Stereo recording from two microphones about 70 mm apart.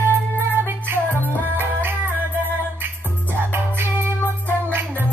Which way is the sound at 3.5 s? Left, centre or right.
Right.